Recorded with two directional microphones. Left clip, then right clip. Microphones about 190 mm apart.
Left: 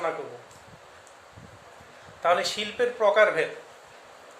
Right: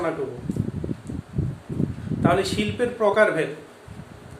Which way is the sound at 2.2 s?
20° left (ahead or behind).